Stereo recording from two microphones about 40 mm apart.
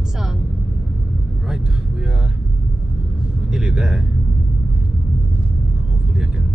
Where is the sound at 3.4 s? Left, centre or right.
Centre.